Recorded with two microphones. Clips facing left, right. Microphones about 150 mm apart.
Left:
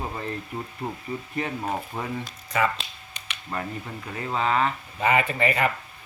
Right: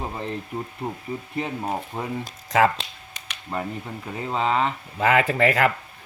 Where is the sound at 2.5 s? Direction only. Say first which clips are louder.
Right 6 dB; 90° right.